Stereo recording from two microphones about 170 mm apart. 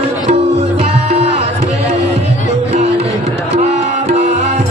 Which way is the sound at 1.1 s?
40° right (ahead or behind).